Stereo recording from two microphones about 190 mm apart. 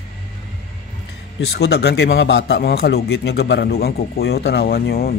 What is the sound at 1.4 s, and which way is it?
Speech, 60° left (ahead or behind).